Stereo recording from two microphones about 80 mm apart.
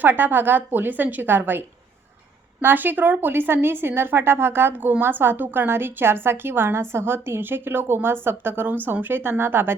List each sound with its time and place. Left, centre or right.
0.0 s speech: right